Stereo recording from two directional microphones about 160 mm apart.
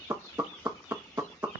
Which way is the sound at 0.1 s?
15° right (ahead or behind).